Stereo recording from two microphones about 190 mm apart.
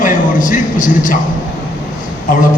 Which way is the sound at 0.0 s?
45° left (ahead or behind).